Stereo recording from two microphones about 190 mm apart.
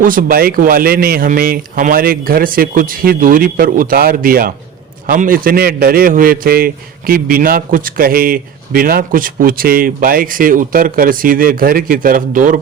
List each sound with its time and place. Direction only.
0.0 s a man's voice: 45° right (ahead or behind)